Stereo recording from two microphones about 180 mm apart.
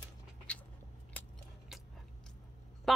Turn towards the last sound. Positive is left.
turn(degrees=0)  # may be behind; listen again after turning